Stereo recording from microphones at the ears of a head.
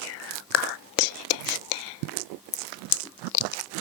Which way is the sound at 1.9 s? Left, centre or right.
Right.